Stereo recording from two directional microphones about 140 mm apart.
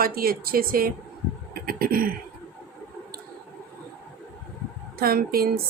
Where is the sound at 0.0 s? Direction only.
90° right.